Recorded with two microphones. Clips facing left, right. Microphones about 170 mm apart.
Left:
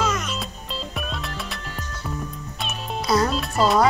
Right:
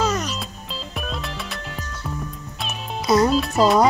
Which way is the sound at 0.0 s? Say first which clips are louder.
Right 2 dB; 35° right (ahead or behind).